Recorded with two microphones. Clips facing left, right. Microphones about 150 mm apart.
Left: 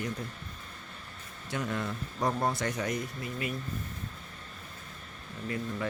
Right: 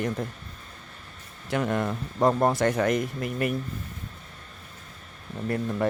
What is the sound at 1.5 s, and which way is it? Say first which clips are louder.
Speech: right 7 dB; 60° right (ahead or behind).